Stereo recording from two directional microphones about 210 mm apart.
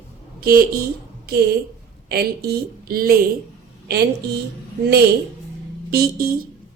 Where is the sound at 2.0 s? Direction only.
50° right (ahead or behind).